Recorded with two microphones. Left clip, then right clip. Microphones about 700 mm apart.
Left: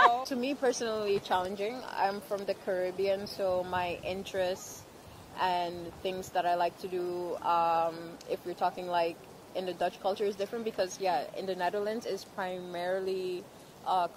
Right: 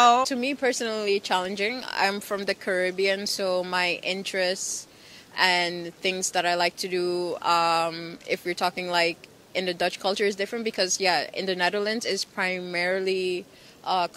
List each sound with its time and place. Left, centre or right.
0.2 s speech: right